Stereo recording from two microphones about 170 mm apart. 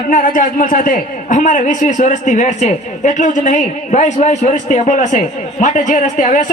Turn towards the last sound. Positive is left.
turn(degrees=45)  # may be behind; listen again after turning